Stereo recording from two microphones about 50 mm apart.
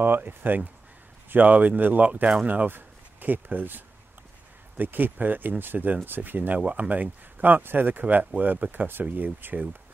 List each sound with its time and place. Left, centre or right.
0.0 s speech: right
6.6 s speech: right